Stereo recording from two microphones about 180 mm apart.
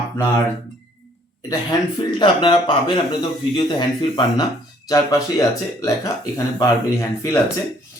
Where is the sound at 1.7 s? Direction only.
20° left (ahead or behind).